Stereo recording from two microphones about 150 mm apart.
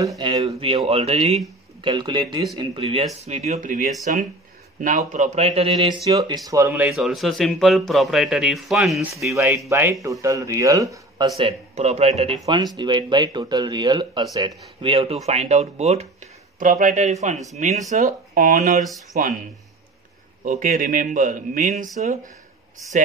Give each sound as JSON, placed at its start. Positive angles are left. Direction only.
{"t": 0.2, "sound": "speech", "side_deg": -40}
{"t": 1.8, "sound": "speech", "side_deg": -30}
{"t": 6.0, "sound": "speech", "side_deg": -25}
{"t": 6.7, "sound": "a man's voice", "side_deg": -10}
{"t": 9.7, "sound": "speech", "side_deg": -15}
{"t": 11.3, "sound": "speech", "side_deg": -45}
{"t": 12.7, "sound": "speech", "side_deg": -30}
{"t": 14.8, "sound": "speech", "side_deg": -40}
{"t": 16.5, "sound": "speech", "side_deg": -65}
{"t": 20.4, "sound": "speech", "side_deg": -70}